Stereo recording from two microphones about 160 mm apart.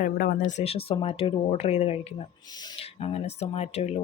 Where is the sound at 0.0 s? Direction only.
60° left (ahead or behind); by 2.1 s 40° left (ahead or behind).